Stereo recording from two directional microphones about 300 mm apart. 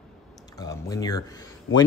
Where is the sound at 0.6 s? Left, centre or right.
Centre.